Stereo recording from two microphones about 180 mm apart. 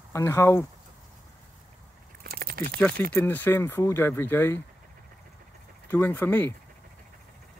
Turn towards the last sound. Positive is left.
turn(degrees=10)  # may be behind; listen again after turning